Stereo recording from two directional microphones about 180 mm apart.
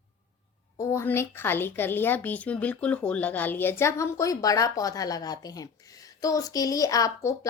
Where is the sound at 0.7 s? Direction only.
15° left (ahead or behind).